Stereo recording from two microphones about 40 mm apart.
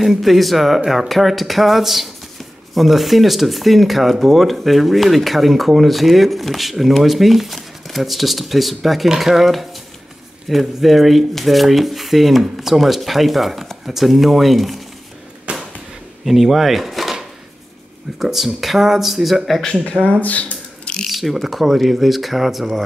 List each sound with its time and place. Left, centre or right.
0.2 s speech: centre
15.5 s a sound: right
16.3 s speech: centre
19.8 s speech: left
20.2 s a sound: left
21.1 s speech: centre